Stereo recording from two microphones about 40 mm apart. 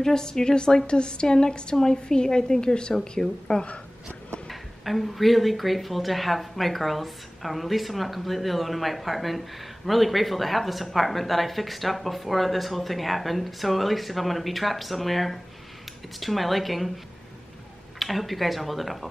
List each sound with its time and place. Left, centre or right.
0.0 s a woman's voice: centre
4.5 s speech: centre
17.9 s speech: centre